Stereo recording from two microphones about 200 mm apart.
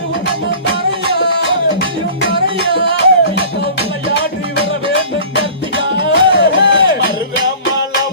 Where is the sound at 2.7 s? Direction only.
60° left (ahead or behind).